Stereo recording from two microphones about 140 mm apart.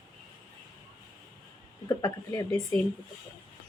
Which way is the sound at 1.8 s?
25° left (ahead or behind).